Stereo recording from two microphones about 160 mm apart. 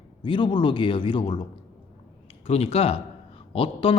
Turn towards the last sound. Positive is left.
turn(degrees=35)  # may be behind; listen again after turning